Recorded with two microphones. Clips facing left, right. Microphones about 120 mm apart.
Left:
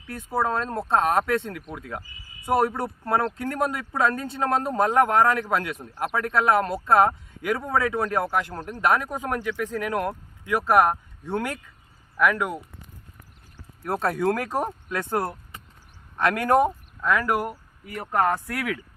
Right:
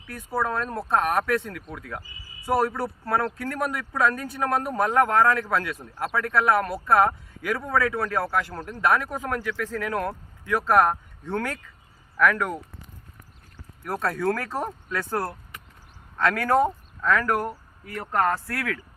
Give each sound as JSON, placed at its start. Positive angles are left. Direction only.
{"t": 0.1, "sound": "speech", "side_deg": 20}
{"t": 13.8, "sound": "speech", "side_deg": 25}